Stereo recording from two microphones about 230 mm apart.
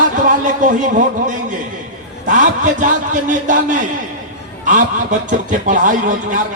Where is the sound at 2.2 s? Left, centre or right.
Right.